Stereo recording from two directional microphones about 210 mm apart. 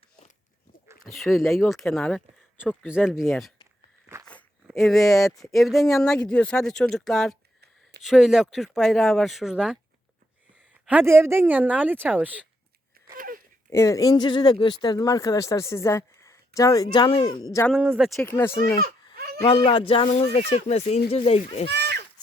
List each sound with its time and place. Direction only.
1.2 s speech: centre (ahead or behind)
10.8 s speech: 10° right (ahead or behind)
13.1 s wail: 40° right (ahead or behind)
13.7 s speech: 15° left (ahead or behind)
17.7 s speech: 5° right (ahead or behind)
18.2 s speech: 10° left (ahead or behind)
19.1 s a sound: 50° right (ahead or behind)
19.4 s speech: 25° left (ahead or behind)